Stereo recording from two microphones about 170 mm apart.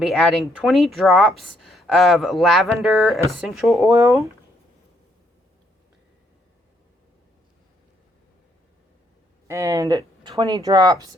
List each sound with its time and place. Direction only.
0.0 s speech: 5° left (ahead or behind)
9.5 s speech: 20° right (ahead or behind)